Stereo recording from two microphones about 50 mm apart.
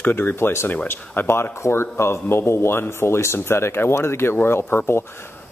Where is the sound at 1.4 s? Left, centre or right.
Left.